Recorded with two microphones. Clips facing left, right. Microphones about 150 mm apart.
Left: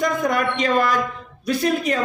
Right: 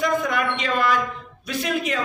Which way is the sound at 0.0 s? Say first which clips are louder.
Left 2 dB; 40° left (ahead or behind).